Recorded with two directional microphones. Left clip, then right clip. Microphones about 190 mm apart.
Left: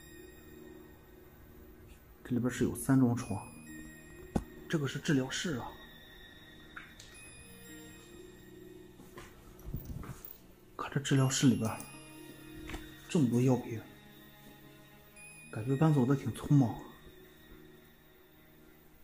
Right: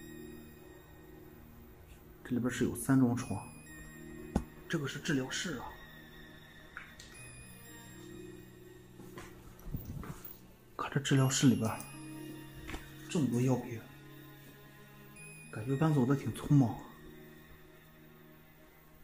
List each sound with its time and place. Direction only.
2.2 s speech: 15° left (ahead or behind)
4.6 s speech: 30° left (ahead or behind)
10.8 s speech: 5° right (ahead or behind)
13.1 s speech: 40° left (ahead or behind)
15.6 s speech: 20° left (ahead or behind); by 16.8 s 5° left (ahead or behind)